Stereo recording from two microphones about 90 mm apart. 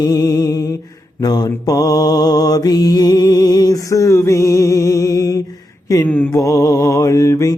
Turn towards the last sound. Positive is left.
turn(degrees=35)  # may be behind; listen again after turning